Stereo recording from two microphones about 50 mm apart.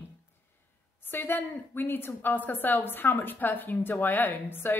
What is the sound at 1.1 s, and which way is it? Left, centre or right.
A woman's voice, left.